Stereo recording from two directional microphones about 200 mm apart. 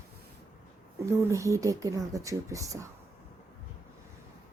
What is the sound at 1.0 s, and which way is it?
Speech, 15° right (ahead or behind).